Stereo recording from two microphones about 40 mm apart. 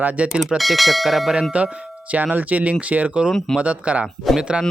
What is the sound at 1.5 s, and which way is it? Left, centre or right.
Speech, right.